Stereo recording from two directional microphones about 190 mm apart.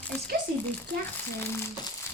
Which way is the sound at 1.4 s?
15° left (ahead or behind).